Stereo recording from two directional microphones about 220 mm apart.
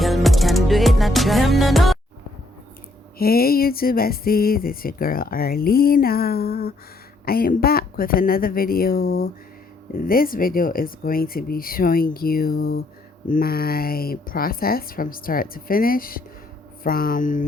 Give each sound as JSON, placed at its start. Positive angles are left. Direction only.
{"t": 0.0, "sound": "music", "side_deg": 0}
{"t": 3.2, "sound": "a sound", "side_deg": 45}
{"t": 7.3, "sound": "speech", "side_deg": 40}